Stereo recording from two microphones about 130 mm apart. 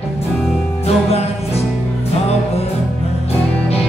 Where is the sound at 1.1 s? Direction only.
55° left (ahead or behind).